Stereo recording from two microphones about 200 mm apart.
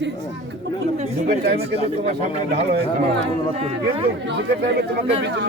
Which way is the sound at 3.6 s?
30° right (ahead or behind).